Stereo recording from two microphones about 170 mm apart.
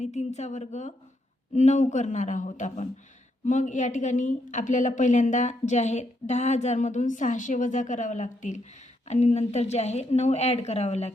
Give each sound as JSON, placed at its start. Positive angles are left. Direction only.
{"t": 0.0, "sound": "a woman's voice", "side_deg": 40}